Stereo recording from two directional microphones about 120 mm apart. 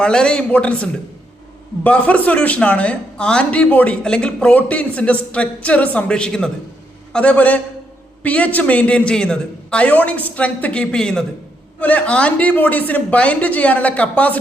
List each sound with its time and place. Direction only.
0.0 s speech: 5° left (ahead or behind)